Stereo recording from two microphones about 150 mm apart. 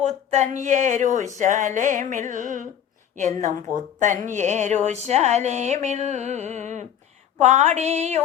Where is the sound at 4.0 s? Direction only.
60° right (ahead or behind).